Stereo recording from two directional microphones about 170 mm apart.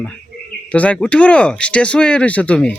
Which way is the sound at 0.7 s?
5° left (ahead or behind).